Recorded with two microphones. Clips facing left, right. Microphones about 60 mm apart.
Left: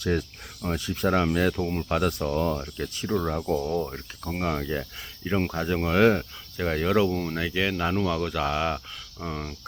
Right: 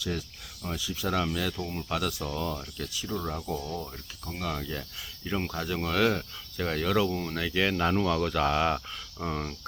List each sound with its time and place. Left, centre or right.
0.0 s speech: left
1.1 s speech: left
2.9 s speech: left
3.2 s speech: left; by 9.6 s centre